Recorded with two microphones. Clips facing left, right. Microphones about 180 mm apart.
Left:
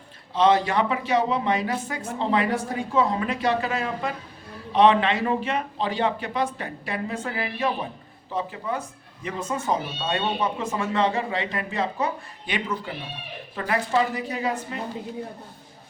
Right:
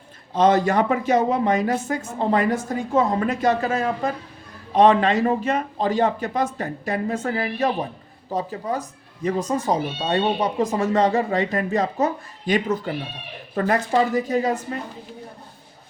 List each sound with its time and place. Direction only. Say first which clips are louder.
0.3 s speech: right 3 dB; 45° right (ahead or behind)